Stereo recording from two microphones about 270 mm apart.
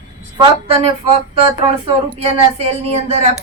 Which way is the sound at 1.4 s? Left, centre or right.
Right.